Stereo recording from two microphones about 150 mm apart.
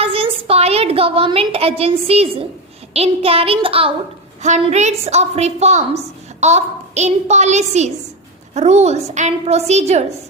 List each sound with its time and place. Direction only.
0.0 s a sound: 40° right (ahead or behind)
2.9 s a child's voice: 40° right (ahead or behind)
4.4 s a woman's voice: 50° right (ahead or behind)